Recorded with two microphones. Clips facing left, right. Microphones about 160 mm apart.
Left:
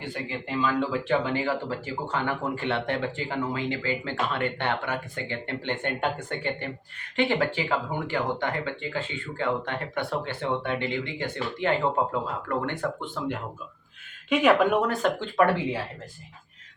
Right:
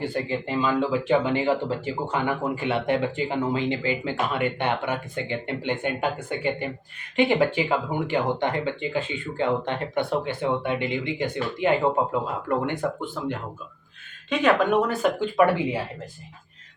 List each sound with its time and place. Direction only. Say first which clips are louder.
0.0 s speech: right 6 dB; 35° right (ahead or behind); by 15.8 s 10° right (ahead or behind)